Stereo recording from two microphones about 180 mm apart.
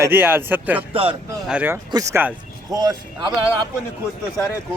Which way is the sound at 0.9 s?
30° right (ahead or behind).